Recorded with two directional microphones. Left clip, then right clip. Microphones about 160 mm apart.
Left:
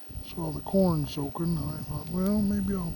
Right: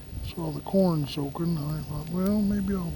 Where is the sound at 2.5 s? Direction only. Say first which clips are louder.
Right 1 dB; centre (ahead or behind).